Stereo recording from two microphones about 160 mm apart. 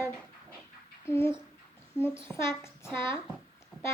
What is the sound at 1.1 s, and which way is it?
Child singing, 15° left (ahead or behind).